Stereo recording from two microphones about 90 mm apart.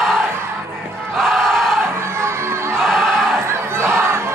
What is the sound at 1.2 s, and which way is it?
Crowd, 5° left (ahead or behind).